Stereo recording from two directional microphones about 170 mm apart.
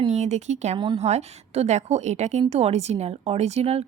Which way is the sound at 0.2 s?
45° right (ahead or behind).